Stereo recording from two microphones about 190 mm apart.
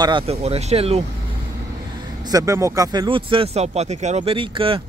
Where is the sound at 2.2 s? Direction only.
20° right (ahead or behind).